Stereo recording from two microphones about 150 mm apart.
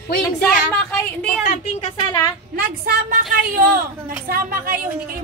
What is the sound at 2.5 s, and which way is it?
Speech, 85° right.